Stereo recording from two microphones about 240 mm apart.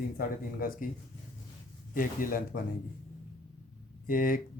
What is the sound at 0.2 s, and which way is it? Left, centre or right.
Speech, left.